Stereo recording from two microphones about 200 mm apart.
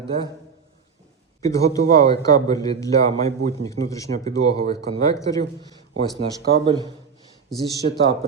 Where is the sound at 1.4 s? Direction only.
15° left (ahead or behind).